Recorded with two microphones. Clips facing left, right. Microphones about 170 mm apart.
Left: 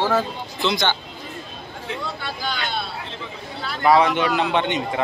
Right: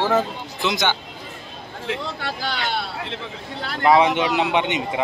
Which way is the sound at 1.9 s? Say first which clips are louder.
Right 3 dB; 80° right.